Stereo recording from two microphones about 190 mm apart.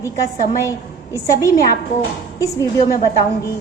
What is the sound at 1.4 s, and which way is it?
Speech, 15° left (ahead or behind).